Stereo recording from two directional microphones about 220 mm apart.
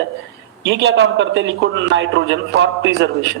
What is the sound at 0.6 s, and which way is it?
A man's voice, 55° right (ahead or behind).